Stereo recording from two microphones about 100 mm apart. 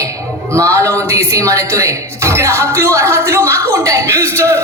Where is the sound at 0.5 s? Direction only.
30° right (ahead or behind).